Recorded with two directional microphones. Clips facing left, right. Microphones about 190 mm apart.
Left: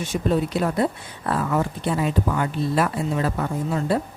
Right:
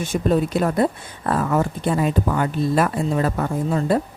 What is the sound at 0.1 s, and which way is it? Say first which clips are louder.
Speech: right 3 dB; 50° right (ahead or behind).